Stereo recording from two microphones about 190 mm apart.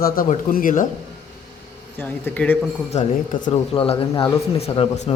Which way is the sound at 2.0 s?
10° left (ahead or behind).